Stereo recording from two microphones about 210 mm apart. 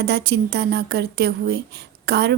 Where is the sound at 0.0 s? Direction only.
50° right (ahead or behind).